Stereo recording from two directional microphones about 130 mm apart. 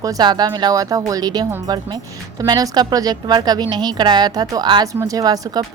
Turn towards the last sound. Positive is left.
turn(degrees=-30)  # may be behind; listen again after turning